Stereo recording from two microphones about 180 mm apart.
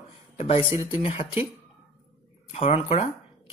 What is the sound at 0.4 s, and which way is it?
Speech, 30° left (ahead or behind).